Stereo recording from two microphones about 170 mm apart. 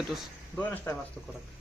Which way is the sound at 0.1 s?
10° left (ahead or behind).